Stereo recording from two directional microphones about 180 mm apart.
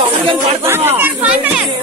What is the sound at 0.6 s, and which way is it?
Speech, 15° right (ahead or behind).